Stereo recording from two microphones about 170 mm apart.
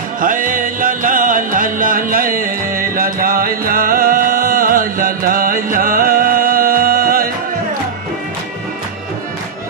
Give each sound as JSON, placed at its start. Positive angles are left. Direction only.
{"t": 0.2, "sound": "music", "side_deg": -55}